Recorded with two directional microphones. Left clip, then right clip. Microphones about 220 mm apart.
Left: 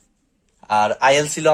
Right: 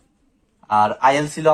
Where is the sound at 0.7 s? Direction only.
55° left (ahead or behind).